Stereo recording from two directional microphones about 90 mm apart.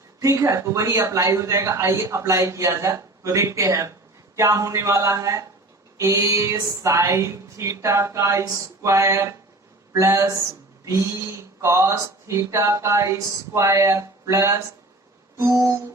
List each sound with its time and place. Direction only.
0.2 s a man's voice: 35° right (ahead or behind)